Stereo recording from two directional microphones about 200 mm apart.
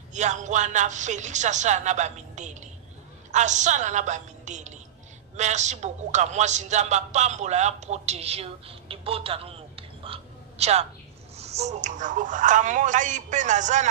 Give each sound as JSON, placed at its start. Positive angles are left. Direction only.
{"t": 0.1, "sound": "a man's voice", "side_deg": -35}